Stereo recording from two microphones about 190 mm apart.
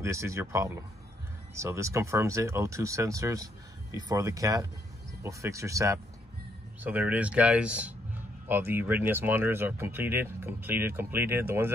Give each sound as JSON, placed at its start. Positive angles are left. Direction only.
{"t": 0.0, "sound": "speech", "side_deg": -15}